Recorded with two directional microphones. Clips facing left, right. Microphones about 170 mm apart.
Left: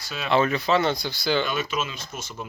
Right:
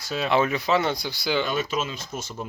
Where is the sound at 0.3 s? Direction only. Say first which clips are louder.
Left 1 dB; 15° right (ahead or behind).